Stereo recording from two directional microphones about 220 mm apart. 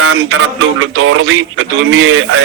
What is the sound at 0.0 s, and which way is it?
A man's voice, 70° right (ahead or behind).